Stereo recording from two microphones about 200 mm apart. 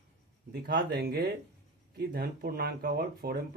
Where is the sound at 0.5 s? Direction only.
55° right (ahead or behind).